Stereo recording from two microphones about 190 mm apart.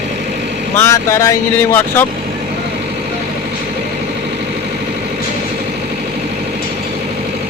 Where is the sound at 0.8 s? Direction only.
15° left (ahead or behind).